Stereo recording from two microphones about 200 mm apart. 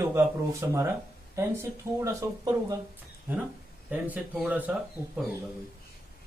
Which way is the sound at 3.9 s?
5° right (ahead or behind).